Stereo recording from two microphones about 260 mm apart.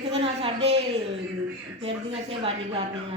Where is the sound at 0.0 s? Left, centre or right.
Right.